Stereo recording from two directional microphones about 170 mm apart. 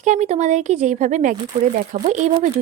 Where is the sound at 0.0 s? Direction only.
45° right (ahead or behind).